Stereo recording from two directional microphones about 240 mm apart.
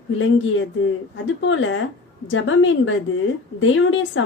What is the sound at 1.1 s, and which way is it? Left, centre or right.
A woman's voice, left.